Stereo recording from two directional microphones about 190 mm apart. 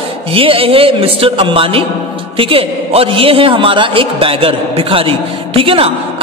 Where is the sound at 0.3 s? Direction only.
30° right (ahead or behind).